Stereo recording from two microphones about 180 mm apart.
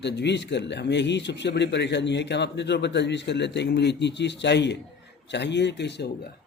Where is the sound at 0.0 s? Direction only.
70° left (ahead or behind).